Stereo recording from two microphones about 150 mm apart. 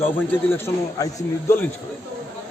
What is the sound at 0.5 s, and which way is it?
A man's voice, 20° left (ahead or behind).